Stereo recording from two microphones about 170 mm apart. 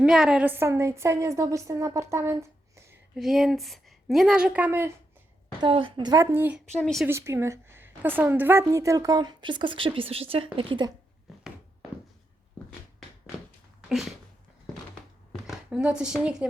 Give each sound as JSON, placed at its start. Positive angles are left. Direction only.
{"t": 0.0, "sound": "a woman's voice", "side_deg": -5}
{"t": 3.2, "sound": "a woman's voice", "side_deg": 0}
{"t": 5.5, "sound": "a woman's voice", "side_deg": -30}
{"t": 6.7, "sound": "a woman's voice", "side_deg": 5}
{"t": 7.1, "sound": "a woman's voice", "side_deg": -15}
{"t": 15.3, "sound": "speech", "side_deg": -5}